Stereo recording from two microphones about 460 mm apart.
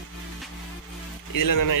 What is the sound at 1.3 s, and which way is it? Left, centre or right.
Speech, left.